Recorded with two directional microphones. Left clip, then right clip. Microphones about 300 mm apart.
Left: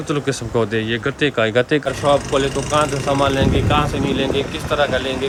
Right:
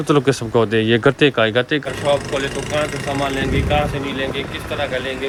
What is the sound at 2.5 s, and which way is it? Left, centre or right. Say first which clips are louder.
Speech: left 3 dB; right.